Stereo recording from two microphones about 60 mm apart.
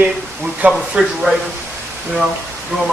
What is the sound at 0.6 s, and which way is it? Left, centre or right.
Speech, centre.